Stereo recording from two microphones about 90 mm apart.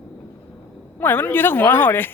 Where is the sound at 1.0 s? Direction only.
20° left (ahead or behind).